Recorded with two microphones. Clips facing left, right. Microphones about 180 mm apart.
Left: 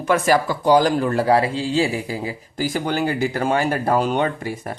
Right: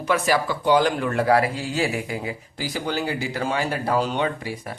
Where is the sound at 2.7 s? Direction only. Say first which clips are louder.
Left 4 dB; 50° left (ahead or behind).